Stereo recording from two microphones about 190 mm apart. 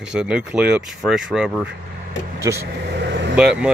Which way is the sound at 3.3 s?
5° right (ahead or behind).